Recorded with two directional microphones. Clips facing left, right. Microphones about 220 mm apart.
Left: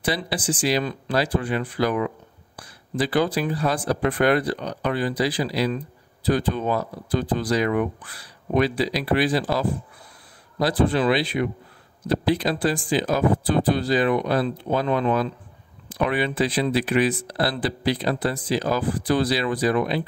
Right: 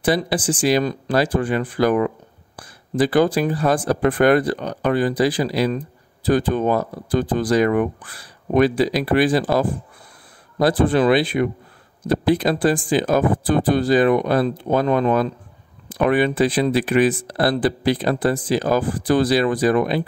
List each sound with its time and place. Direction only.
0.0 s speech: 50° right (ahead or behind)